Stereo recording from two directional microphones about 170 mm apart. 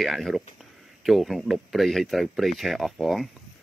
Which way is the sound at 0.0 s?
Centre (ahead or behind).